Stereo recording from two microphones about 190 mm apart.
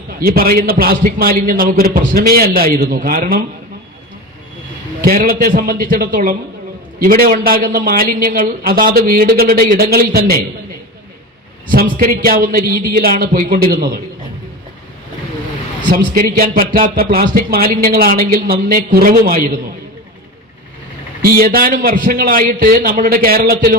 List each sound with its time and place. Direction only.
0.2 s a man's voice: 50° right (ahead or behind)
5.0 s a man's voice: 50° right (ahead or behind)
11.7 s a man's voice: 50° right (ahead or behind)
15.8 s a man's voice: 50° right (ahead or behind)
21.2 s a man's voice: 50° right (ahead or behind)